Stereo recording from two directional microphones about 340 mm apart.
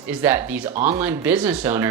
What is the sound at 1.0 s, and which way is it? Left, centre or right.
Speech, centre.